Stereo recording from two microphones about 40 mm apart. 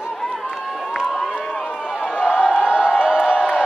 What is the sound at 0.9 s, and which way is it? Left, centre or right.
Crowd, centre.